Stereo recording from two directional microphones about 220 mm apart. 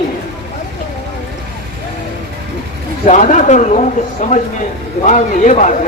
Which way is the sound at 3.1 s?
30° left (ahead or behind).